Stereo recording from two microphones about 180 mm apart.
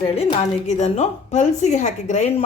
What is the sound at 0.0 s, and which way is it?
A woman's voice, 35° left (ahead or behind).